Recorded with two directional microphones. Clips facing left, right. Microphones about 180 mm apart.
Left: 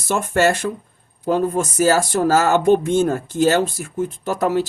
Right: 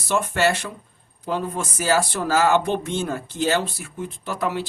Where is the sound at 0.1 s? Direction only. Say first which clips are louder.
Left 3 dB; 45° left (ahead or behind).